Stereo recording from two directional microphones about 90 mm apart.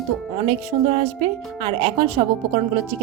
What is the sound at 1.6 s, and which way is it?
Speech, 80° right.